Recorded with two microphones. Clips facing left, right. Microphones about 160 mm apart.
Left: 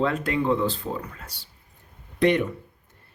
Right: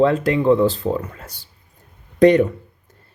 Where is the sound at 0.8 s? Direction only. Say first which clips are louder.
Right 9 dB; 90° right.